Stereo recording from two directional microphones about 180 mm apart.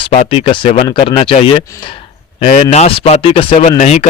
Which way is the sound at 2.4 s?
40° left (ahead or behind).